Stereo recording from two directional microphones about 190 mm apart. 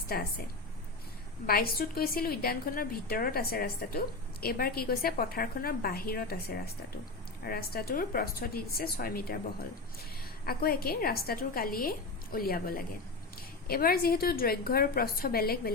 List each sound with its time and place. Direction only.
0.1 s a woman's voice: 50° left (ahead or behind)
1.5 s a woman's voice: 50° left (ahead or behind)
10.4 s a woman's voice: 50° left (ahead or behind)